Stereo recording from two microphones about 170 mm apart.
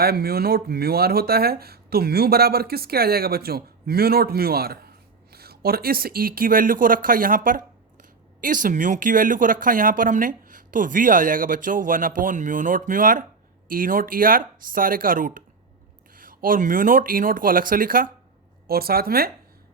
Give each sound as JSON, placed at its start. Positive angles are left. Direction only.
{"t": 0.0, "sound": "speech", "side_deg": -65}